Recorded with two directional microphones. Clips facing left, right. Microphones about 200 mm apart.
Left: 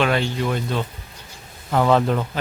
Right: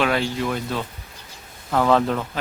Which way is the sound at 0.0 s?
Centre (ahead or behind).